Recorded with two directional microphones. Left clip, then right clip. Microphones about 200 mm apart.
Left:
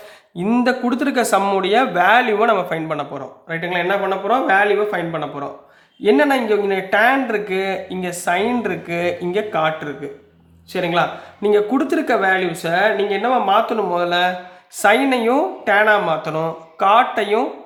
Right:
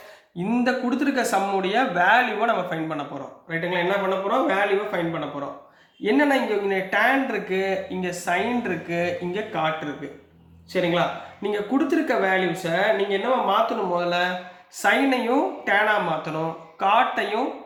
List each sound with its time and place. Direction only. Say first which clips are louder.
0.3 s speech: left 5 dB; 40° left (ahead or behind)
10.7 s a man's voice: left 4 dB; 45° left (ahead or behind)